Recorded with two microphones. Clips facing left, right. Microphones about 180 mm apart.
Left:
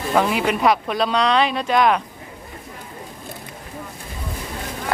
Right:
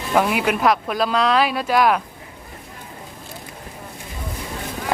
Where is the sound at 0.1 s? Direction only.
5° right (ahead or behind).